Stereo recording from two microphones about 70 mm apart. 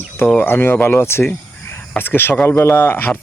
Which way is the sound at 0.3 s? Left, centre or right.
Left.